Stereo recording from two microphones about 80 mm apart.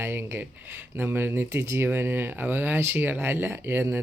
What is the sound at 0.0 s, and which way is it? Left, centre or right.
Speech, right.